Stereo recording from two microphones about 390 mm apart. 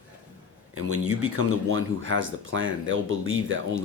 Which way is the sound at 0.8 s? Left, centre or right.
Right.